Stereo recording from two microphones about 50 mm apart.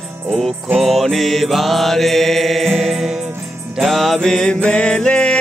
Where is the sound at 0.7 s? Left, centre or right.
Centre.